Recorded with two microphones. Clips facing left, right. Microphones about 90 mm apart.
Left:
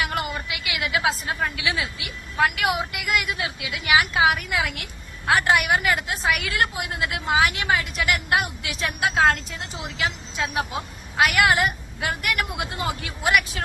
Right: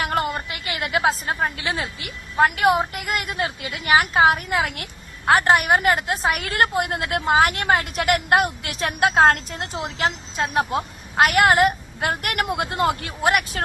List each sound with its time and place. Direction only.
0.0 s a woman's voice: 40° right (ahead or behind)
9.8 s a woman's voice: 45° right (ahead or behind)